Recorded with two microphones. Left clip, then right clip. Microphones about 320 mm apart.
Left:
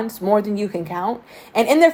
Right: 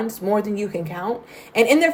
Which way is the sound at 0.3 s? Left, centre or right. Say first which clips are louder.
Left 4 dB; centre.